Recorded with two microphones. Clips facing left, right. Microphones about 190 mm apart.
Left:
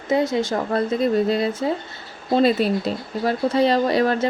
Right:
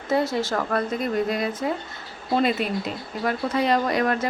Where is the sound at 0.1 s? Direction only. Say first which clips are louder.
Left 3 dB; 20° left (ahead or behind).